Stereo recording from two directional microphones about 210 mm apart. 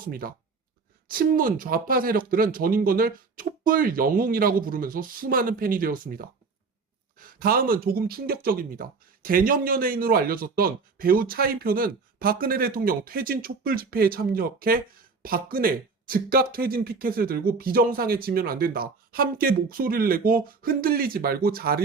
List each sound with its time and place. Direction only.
0.1 s speech: 45° right (ahead or behind)